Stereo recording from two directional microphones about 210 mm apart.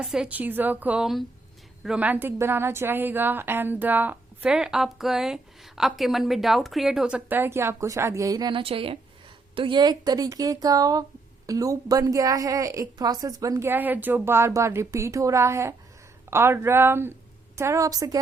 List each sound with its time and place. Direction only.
0.0 s a woman's voice: 5° right (ahead or behind)